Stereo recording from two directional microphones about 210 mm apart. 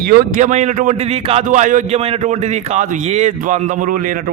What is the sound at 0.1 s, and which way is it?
A man's voice, 45° right (ahead or behind).